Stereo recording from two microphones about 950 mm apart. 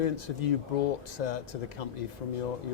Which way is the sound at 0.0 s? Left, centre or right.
Left.